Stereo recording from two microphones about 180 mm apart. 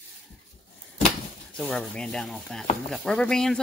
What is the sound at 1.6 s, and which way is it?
Speech, 5° left (ahead or behind).